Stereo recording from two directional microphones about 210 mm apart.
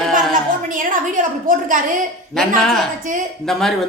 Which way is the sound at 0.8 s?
40° right (ahead or behind).